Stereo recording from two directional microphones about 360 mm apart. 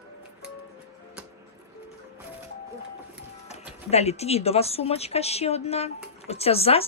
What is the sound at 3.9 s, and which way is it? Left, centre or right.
Speech, centre.